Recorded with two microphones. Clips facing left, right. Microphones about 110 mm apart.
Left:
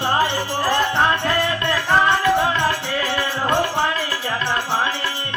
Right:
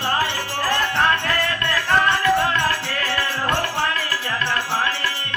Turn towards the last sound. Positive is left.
turn(degrees=15)  # may be behind; listen again after turning